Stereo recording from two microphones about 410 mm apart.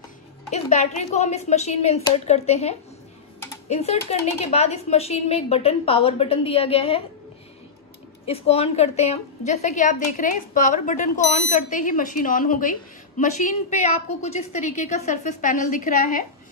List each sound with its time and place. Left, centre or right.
0.5 s speech: centre
8.3 s a woman's voice: centre